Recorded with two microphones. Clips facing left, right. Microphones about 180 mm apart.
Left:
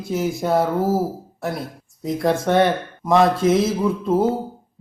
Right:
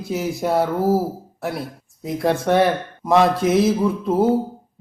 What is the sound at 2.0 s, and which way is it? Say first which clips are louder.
Speech: even; centre (ahead or behind).